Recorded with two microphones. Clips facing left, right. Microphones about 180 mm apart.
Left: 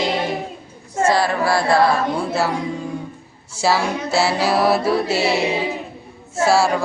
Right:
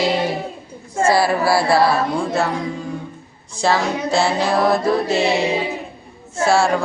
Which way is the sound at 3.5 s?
5° left (ahead or behind).